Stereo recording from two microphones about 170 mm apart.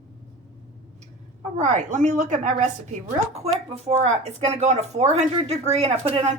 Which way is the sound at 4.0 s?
45° right (ahead or behind).